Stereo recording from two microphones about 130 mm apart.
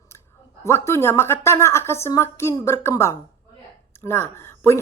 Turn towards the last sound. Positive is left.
turn(degrees=20)  # may be behind; listen again after turning